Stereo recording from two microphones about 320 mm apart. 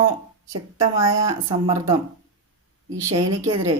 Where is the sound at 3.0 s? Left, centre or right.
Centre.